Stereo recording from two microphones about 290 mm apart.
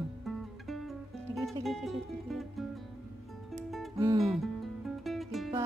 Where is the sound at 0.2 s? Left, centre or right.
Centre.